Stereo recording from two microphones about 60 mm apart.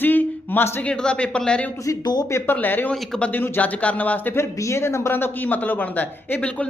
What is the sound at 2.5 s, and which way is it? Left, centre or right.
Speech, left.